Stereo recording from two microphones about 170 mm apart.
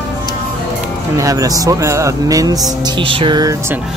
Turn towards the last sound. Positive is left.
turn(degrees=-15)  # may be behind; listen again after turning